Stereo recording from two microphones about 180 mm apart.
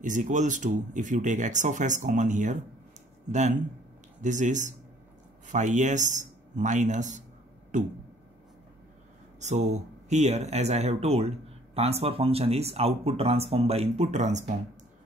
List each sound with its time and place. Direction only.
0.0 s speech: 45° right (ahead or behind)
9.4 s speech: 40° right (ahead or behind)